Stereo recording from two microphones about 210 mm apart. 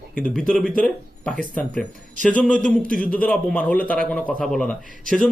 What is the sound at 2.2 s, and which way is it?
A man's voice, 5° left (ahead or behind).